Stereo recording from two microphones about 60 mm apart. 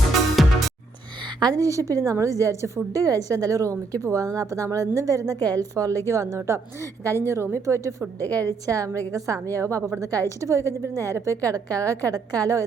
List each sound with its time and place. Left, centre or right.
0.1 s music: centre
1.5 s a woman's voice: right
6.1 s a woman's voice: right
8.6 s a woman's voice: right
11.4 s a woman's voice: right